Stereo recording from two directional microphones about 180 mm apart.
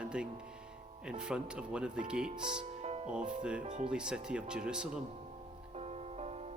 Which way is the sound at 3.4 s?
5° right (ahead or behind).